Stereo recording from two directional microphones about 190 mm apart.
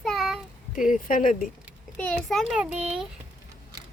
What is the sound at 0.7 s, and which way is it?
Speech, 45° left (ahead or behind).